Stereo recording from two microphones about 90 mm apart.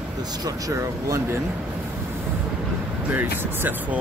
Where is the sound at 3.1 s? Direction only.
20° right (ahead or behind).